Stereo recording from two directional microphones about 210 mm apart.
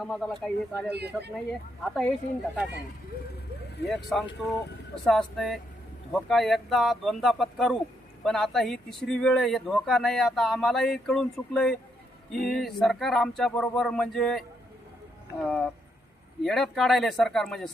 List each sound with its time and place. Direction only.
0.0 s speech: centre (ahead or behind)
0.9 s speech: 50° right (ahead or behind)
1.8 s speech: 5° left (ahead or behind)
3.8 s speech: centre (ahead or behind)